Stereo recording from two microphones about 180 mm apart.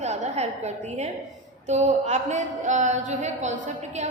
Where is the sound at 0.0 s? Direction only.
40° right (ahead or behind).